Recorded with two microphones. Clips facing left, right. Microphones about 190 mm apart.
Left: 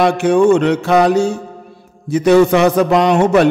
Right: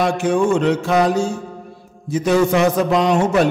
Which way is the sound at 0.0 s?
70° left (ahead or behind).